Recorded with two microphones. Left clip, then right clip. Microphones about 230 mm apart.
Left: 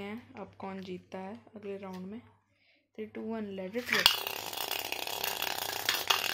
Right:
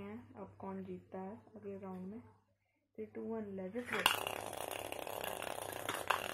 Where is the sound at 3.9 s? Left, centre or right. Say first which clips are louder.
Left 8 dB; centre.